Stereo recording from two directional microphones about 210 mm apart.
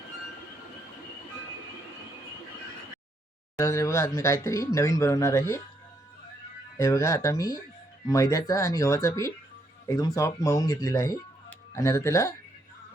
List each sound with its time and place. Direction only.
3.6 s speech: 15° left (ahead or behind)
6.7 s speech: 15° left (ahead or behind)